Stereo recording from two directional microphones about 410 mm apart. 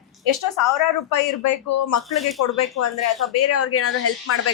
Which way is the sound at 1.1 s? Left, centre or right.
Left.